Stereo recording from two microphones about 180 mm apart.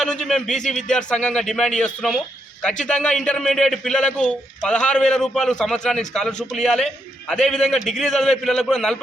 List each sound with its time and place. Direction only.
0.0 s a man's voice: 5° left (ahead or behind)
0.5 s speech: 40° left (ahead or behind)
0.9 s a man's voice: 5° left (ahead or behind)